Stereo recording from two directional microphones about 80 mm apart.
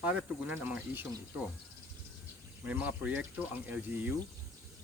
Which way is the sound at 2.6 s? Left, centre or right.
Centre.